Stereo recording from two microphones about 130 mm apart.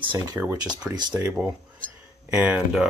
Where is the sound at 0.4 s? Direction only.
15° right (ahead or behind).